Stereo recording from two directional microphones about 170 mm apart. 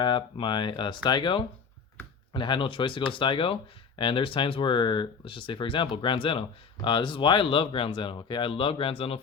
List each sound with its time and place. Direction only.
0.0 s speech: 30° left (ahead or behind)